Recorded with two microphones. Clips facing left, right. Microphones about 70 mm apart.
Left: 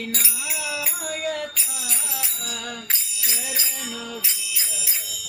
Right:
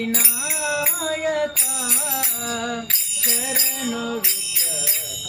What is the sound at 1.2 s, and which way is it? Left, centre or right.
Bicycle bell, right.